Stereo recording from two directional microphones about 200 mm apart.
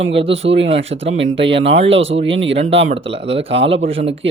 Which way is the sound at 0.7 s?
70° right (ahead or behind).